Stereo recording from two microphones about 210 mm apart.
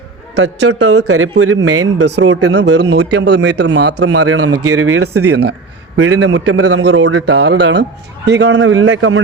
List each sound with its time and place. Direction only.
0.4 s speech: 90° right
2.7 s speech: 55° right (ahead or behind)
4.0 s speech: 90° right
6.0 s a man's voice: 70° right (ahead or behind)
6.8 s speech: 65° right (ahead or behind)